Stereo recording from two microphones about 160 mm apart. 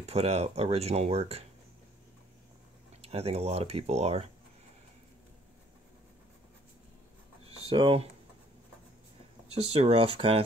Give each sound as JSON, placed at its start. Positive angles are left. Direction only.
{"t": 0.0, "sound": "speech", "side_deg": -40}
{"t": 3.0, "sound": "speech", "side_deg": -40}
{"t": 7.4, "sound": "a sound", "side_deg": -35}
{"t": 9.7, "sound": "speech", "side_deg": -40}